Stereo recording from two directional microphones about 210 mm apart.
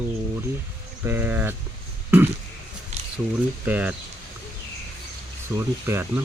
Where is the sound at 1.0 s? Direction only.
10° right (ahead or behind).